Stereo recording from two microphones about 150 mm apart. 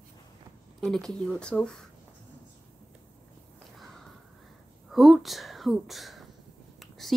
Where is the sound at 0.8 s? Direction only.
Centre (ahead or behind).